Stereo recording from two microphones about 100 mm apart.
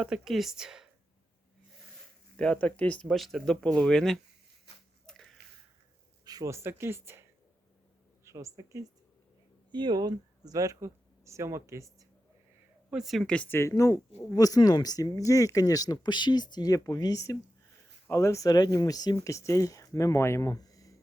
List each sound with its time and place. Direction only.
0.0 s speech: 5° right (ahead or behind)
2.3 s speech: 10° left (ahead or behind)
3.1 s speech: centre (ahead or behind)
5.0 s a sound: 5° left (ahead or behind)
6.2 s speech: 35° right (ahead or behind)
8.2 s a sound: 30° right (ahead or behind)
8.5 s speech: 35° right (ahead or behind)
9.7 s speech: 45° right (ahead or behind); by 12.0 s 30° right (ahead or behind)
12.9 s speech: 5° right (ahead or behind)
13.5 s speech: 30° left (ahead or behind)